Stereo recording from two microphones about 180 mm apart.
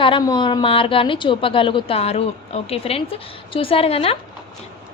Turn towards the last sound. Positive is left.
turn(degrees=30)  # may be behind; listen again after turning